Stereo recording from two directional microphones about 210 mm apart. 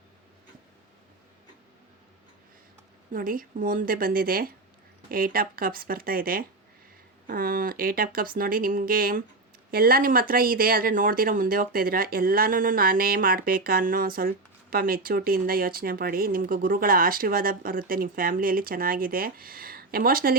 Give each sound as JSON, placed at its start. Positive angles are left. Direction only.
{"t": 3.1, "sound": "speech", "side_deg": -40}